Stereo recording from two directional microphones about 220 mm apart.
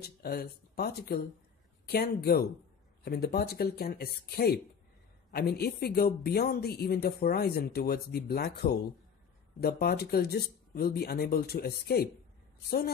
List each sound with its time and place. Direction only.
0.0 s speech: 45° left (ahead or behind)